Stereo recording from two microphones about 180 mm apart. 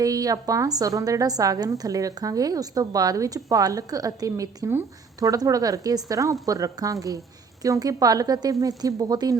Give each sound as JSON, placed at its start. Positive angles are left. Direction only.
{"t": 0.0, "sound": "a woman's voice", "side_deg": -20}